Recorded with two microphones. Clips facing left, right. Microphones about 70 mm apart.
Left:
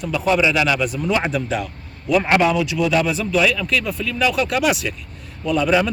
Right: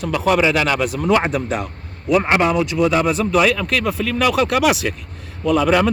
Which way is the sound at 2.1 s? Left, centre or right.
Right.